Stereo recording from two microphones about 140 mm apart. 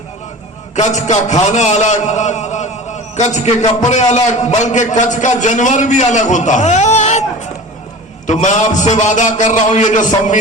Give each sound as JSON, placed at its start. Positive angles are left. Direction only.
{"t": 0.8, "sound": "a man's voice", "side_deg": 55}
{"t": 8.3, "sound": "a man's voice", "side_deg": 60}